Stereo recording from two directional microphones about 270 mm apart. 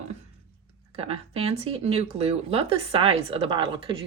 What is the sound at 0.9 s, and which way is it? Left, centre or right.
Speech, right.